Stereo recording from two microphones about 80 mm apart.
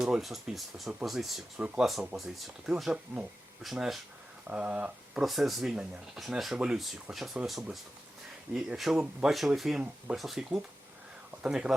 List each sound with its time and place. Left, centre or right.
0.0 s speech: centre
1.5 s speech: centre
1.8 s speech: centre
4.4 s speech: centre
5.2 s speech: centre